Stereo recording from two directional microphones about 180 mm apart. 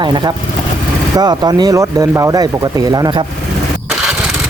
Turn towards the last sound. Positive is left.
turn(degrees=-20)  # may be behind; listen again after turning